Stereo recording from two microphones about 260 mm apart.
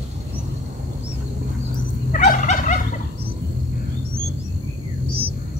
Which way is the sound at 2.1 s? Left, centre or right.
Left.